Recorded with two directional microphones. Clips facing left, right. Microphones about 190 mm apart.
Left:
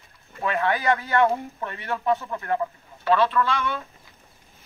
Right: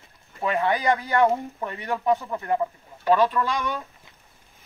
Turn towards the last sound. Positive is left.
turn(degrees=-15)  # may be behind; listen again after turning